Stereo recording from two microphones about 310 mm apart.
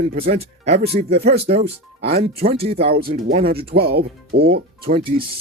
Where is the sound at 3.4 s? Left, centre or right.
Centre.